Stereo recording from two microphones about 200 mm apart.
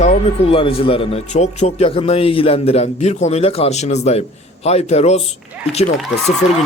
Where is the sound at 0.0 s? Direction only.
25° left (ahead or behind).